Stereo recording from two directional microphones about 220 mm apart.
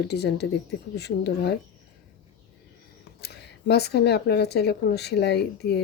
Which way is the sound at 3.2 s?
50° left (ahead or behind).